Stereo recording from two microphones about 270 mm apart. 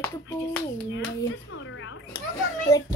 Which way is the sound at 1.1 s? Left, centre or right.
Left.